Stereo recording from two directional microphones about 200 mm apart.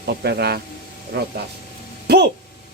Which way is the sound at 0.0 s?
55° right (ahead or behind).